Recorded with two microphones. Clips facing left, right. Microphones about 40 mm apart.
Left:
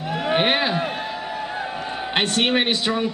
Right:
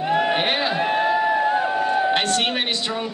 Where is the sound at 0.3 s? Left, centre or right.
Centre.